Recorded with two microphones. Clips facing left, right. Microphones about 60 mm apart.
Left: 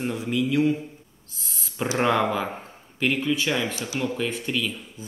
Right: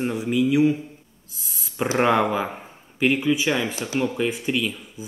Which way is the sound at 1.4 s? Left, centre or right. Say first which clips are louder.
Left 1 dB; centre.